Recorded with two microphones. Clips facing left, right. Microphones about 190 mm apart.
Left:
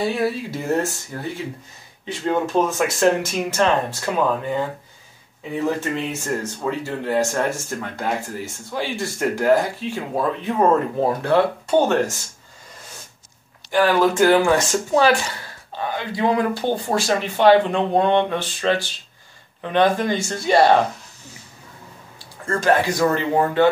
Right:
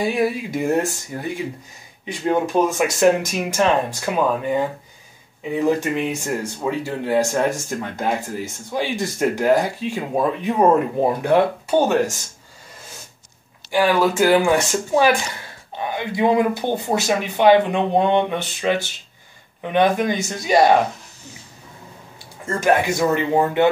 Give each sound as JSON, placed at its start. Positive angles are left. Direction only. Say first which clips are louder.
{"t": 0.0, "sound": "speech", "louder": "right 1 dB", "side_deg": -15}
{"t": 13.7, "sound": "speech", "louder": "even", "side_deg": -10}
{"t": 22.4, "sound": "speech", "louder": "even", "side_deg": -20}